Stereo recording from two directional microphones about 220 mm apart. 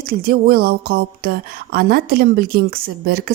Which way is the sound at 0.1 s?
45° right (ahead or behind).